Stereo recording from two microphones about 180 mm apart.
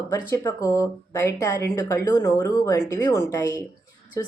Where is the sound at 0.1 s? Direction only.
20° left (ahead or behind).